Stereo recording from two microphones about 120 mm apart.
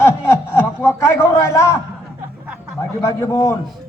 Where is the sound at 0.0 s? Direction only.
20° left (ahead or behind).